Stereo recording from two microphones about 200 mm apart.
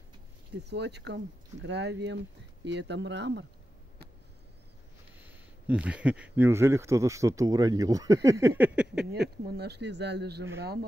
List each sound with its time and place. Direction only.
0.7 s speech: 60° right (ahead or behind)
5.2 s speech: 10° right (ahead or behind)
9.5 s speech: 55° right (ahead or behind)